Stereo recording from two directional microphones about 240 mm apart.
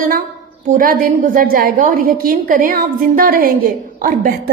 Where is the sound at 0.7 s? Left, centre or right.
Right.